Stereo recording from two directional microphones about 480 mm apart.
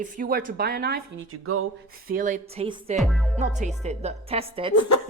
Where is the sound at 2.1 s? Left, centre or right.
Centre.